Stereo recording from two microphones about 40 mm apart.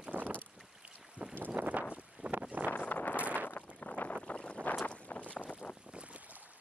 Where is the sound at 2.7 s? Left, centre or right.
Left.